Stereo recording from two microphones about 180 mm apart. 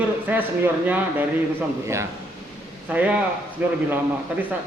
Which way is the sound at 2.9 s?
10° right (ahead or behind).